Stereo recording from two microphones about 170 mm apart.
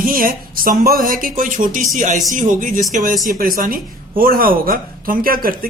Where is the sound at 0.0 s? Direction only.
55° right (ahead or behind).